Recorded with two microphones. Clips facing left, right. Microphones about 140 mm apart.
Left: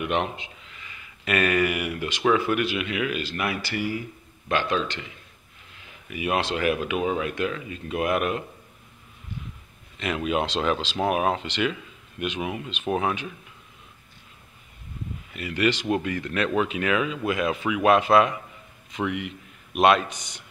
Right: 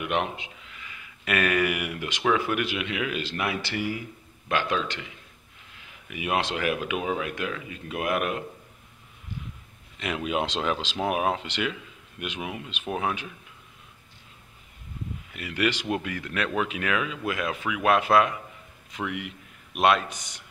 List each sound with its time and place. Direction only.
0.0 s a man's voice: 10° right (ahead or behind)
6.0 s speech: 15° right (ahead or behind)
7.0 s speech: centre (ahead or behind)
9.9 s speech: 10° right (ahead or behind)
15.3 s a man's voice: 10° right (ahead or behind)